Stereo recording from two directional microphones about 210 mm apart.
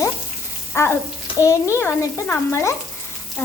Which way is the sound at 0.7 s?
10° left (ahead or behind).